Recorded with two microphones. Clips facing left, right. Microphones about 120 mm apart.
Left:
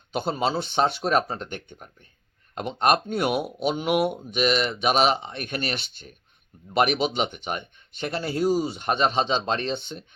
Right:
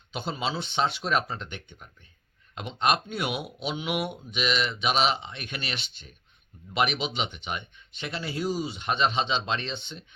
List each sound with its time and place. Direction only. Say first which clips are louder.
0.1 s speech: left 6 dB; 45° left (ahead or behind)